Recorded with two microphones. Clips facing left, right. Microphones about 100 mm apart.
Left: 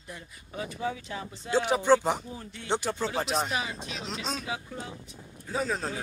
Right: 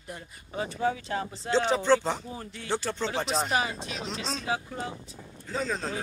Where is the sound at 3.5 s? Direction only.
40° right (ahead or behind).